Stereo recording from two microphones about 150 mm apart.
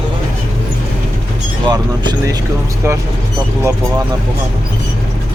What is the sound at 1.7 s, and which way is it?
Speech, 25° right (ahead or behind).